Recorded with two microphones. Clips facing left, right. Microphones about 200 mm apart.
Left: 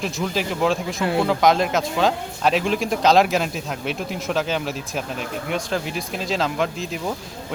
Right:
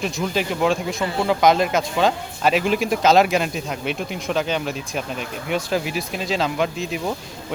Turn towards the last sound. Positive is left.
turn(degrees=0)  # may be behind; listen again after turning